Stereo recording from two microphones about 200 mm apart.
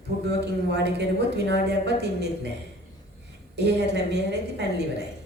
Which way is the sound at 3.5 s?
55° right (ahead or behind).